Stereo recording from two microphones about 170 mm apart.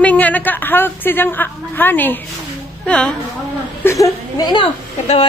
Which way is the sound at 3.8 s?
15° left (ahead or behind).